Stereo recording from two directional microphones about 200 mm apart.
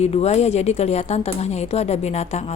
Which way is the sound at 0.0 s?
30° left (ahead or behind).